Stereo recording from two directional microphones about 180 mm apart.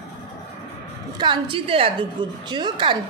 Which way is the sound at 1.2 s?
25° right (ahead or behind).